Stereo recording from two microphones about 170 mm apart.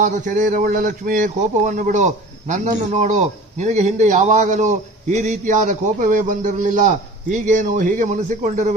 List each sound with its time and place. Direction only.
0.0 s a man's voice: 45° right (ahead or behind)